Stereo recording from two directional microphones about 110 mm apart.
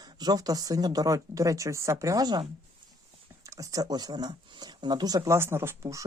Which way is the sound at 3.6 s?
35° right (ahead or behind).